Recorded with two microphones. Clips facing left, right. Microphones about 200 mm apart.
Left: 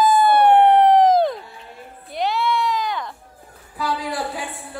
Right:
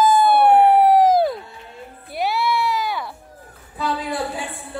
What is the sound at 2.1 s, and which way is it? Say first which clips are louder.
Music: even; 5° right (ahead or behind).